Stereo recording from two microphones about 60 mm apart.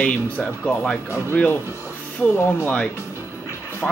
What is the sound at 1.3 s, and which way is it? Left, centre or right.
Speech, left.